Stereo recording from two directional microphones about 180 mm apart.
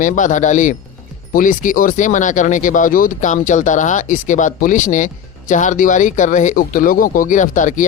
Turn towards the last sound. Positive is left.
turn(degrees=45)  # may be behind; listen again after turning